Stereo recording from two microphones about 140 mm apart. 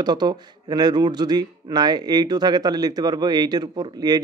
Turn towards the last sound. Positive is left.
turn(degrees=-30)  # may be behind; listen again after turning